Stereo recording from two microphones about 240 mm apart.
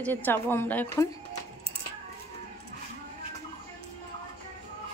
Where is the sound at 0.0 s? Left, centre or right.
Centre.